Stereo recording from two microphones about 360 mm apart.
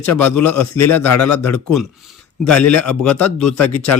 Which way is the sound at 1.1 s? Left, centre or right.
Left.